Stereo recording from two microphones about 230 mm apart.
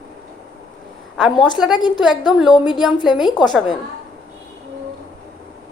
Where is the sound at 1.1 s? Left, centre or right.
Centre.